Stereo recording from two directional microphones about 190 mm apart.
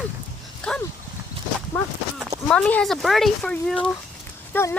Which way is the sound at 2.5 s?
5° left (ahead or behind).